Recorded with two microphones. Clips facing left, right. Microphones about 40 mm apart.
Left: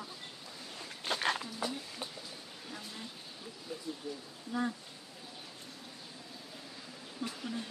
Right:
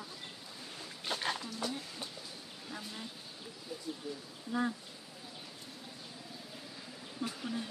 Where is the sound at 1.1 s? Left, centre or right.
Left.